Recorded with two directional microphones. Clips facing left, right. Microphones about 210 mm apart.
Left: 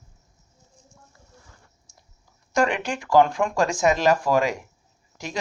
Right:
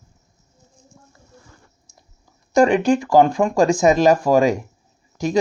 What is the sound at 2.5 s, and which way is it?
Speech, 40° right (ahead or behind).